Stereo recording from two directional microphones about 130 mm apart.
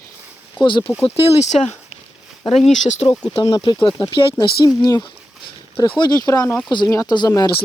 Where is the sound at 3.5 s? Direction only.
30° left (ahead or behind).